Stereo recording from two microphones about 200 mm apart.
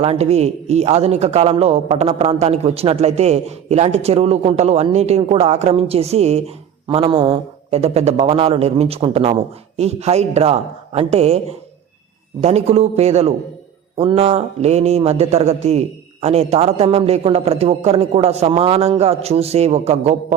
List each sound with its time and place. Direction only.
0.0 s a man's voice: 30° right (ahead or behind)